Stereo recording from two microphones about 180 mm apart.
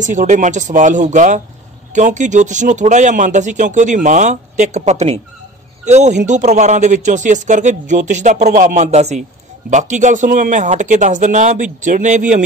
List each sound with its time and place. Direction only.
0.0 s a man's voice: 45° right (ahead or behind)